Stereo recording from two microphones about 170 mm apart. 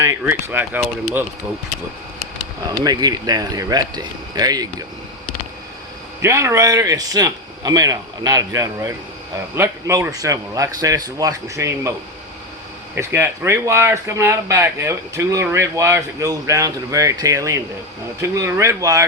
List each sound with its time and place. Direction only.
0.0 s speech: 15° right (ahead or behind)
2.6 s a man's voice: 25° right (ahead or behind)
6.2 s a man's voice: 15° right (ahead or behind)
13.0 s speech: 15° right (ahead or behind)